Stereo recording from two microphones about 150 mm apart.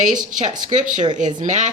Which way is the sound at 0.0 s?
60° right (ahead or behind).